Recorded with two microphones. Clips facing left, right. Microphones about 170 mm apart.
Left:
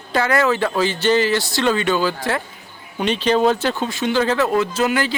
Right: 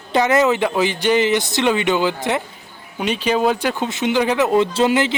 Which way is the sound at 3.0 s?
10° right (ahead or behind).